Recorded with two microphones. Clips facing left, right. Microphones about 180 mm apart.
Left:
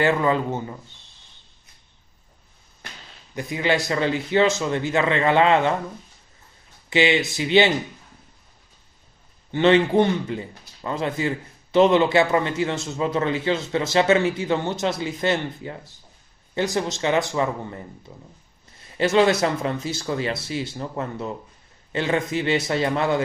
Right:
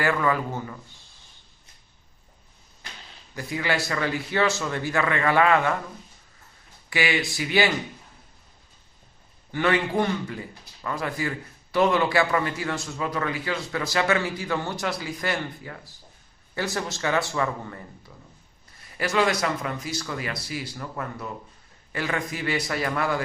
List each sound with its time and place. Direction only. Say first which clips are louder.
0.0 s a man's voice: left 4 dB; 25° left (ahead or behind)
3.3 s a man's voice: left 4 dB; 20° left (ahead or behind)
6.9 s a man's voice: left 6 dB; 20° left (ahead or behind)
9.5 s a man's voice: left 7 dB; 25° left (ahead or behind)